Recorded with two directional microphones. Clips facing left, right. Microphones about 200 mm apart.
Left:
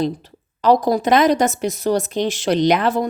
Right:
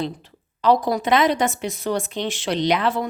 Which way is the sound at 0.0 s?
40° left (ahead or behind).